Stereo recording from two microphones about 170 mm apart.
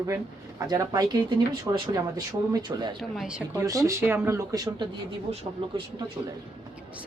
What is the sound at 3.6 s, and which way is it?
Speech, 20° right (ahead or behind).